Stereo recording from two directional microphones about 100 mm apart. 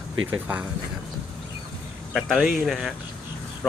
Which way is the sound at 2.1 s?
5° left (ahead or behind).